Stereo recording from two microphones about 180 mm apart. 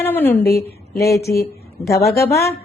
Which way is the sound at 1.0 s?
60° left (ahead or behind).